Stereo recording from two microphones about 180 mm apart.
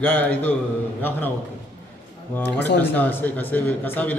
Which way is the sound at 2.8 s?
10° left (ahead or behind).